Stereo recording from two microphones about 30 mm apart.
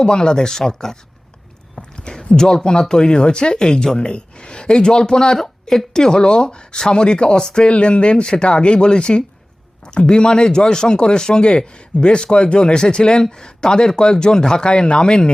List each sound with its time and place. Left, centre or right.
0.0 s speech: left
1.7 s a sound: left
2.9 s speech: left
5.4 s a sound: centre
5.9 s speech: centre
6.1 s speech: left
7.7 s speech: left
14.7 s speech: left